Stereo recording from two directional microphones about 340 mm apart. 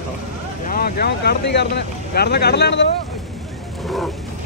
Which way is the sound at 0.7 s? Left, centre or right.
Left.